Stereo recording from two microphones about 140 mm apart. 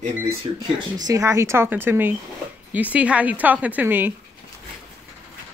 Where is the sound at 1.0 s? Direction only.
20° right (ahead or behind).